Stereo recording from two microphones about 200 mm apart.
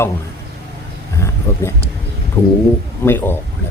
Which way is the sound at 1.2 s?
15° left (ahead or behind).